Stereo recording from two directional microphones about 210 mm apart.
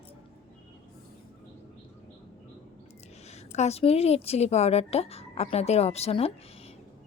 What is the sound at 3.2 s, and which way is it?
A woman's voice, 30° left (ahead or behind).